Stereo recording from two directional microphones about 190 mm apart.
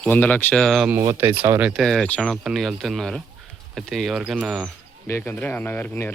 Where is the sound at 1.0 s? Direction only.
15° right (ahead or behind).